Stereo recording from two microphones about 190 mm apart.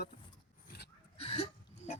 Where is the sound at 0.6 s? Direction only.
60° left (ahead or behind).